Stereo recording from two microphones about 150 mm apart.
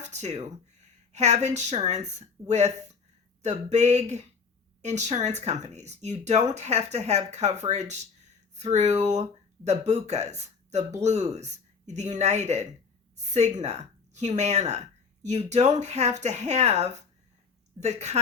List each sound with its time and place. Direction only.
0.0 s a woman's voice: 50° right (ahead or behind)